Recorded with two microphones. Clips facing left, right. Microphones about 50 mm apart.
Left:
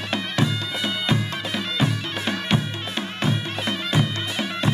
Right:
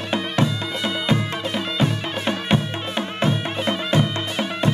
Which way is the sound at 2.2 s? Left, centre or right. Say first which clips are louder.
Right 2 dB; right.